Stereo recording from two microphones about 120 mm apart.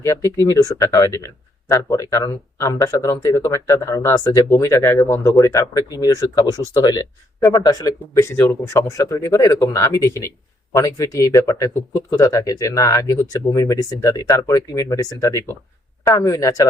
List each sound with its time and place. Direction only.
0.0 s speech: 25° left (ahead or behind)
8.2 s speech: 20° left (ahead or behind)